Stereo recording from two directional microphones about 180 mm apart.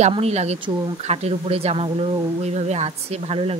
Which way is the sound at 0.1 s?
35° right (ahead or behind).